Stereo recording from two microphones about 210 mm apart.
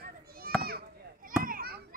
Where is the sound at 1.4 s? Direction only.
45° right (ahead or behind).